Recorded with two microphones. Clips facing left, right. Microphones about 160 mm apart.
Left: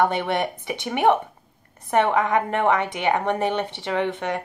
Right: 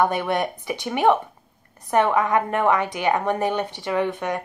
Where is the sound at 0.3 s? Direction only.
20° left (ahead or behind).